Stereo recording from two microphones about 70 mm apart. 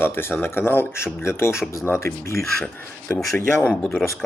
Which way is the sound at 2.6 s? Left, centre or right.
Left.